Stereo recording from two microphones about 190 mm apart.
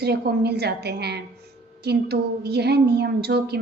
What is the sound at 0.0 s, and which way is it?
A woman's voice, 60° right (ahead or behind).